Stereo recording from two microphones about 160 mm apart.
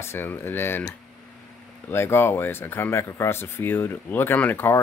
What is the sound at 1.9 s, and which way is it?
Speech, 15° left (ahead or behind).